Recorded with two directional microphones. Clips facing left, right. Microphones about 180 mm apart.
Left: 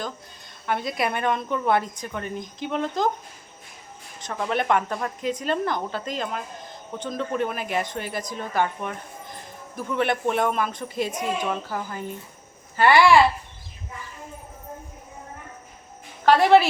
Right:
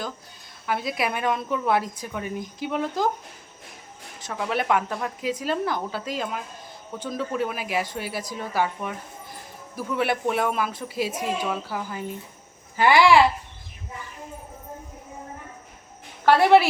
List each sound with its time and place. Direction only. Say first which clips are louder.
0.7 s speech: left 1 dB; 5° right (ahead or behind)
4.2 s speech: left 1 dB; 5° right (ahead or behind)
16.2 s speech: even; 10° right (ahead or behind)